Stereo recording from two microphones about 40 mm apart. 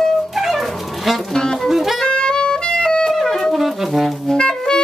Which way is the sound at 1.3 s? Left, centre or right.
Centre.